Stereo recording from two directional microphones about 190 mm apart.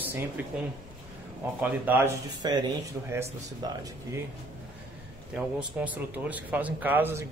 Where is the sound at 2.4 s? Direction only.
20° right (ahead or behind).